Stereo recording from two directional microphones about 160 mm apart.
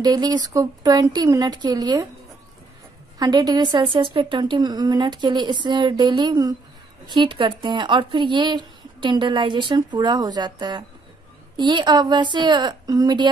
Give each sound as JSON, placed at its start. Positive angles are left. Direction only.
{"t": 0.0, "sound": "speech", "side_deg": -25}
{"t": 3.2, "sound": "speech", "side_deg": -25}